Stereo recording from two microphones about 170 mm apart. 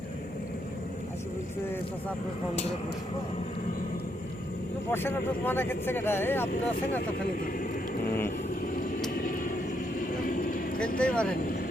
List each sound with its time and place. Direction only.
4.9 s speech: 15° left (ahead or behind)
7.3 s vehicle: 55° left (ahead or behind)
10.9 s speech: 5° left (ahead or behind)